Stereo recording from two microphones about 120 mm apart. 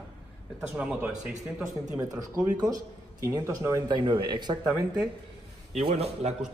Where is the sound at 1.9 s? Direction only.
30° right (ahead or behind).